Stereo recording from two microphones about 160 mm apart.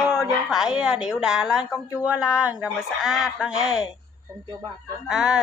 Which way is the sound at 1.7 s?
20° left (ahead or behind).